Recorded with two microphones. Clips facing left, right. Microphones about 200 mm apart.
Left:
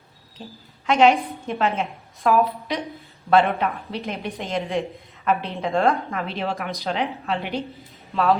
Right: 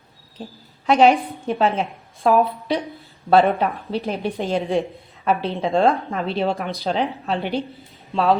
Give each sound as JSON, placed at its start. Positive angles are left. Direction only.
{"t": 0.9, "sound": "a woman's voice", "side_deg": -35}